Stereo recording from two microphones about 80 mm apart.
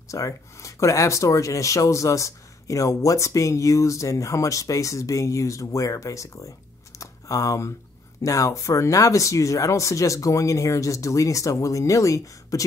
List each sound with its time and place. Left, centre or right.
0.1 s speech: left
7.0 s a sound: left
8.2 s speech: left